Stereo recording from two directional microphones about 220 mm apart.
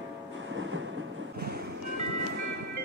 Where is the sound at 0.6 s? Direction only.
60° right (ahead or behind).